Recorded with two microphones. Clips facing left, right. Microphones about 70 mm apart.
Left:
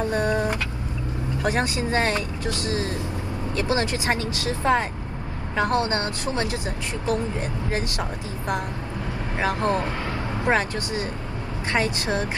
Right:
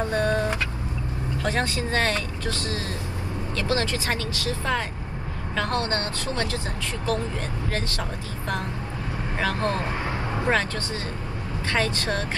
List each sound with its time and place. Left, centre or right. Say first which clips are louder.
0.1 s vehicle: left 1 dB; centre
1.4 s speech: left 2 dB; left